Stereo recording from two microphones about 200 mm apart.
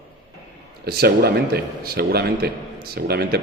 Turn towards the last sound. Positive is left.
turn(degrees=-55)  # may be behind; listen again after turning